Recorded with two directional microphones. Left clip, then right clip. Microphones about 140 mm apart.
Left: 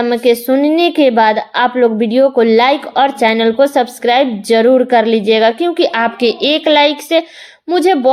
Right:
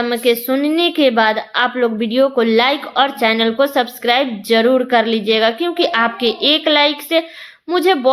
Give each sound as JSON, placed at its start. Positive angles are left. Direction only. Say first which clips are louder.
{"t": 0.0, "sound": "speech", "louder": "left 4 dB", "side_deg": 35}